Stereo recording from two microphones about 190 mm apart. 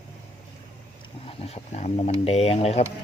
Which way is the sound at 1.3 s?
30° left (ahead or behind).